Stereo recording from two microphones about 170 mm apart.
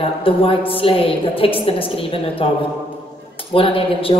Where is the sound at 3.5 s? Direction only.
30° left (ahead or behind).